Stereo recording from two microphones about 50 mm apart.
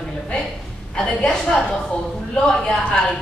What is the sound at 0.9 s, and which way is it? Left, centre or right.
A woman's voice, centre.